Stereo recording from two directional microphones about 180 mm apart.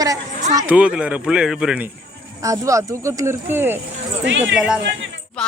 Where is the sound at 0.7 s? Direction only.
5° right (ahead or behind).